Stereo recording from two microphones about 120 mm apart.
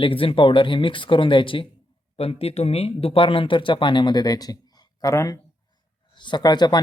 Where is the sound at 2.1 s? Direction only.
55° left (ahead or behind); by 6.8 s 35° left (ahead or behind).